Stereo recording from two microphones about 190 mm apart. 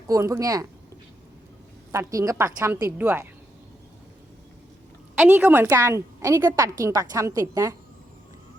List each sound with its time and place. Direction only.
0.1 s a woman's voice: 15° right (ahead or behind)
1.9 s a woman's voice: 15° right (ahead or behind)
3.0 s a woman's voice: 5° right (ahead or behind)
5.1 s a woman's voice: 10° right (ahead or behind)